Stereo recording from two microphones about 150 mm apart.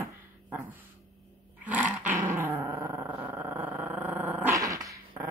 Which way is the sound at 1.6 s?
10° right (ahead or behind).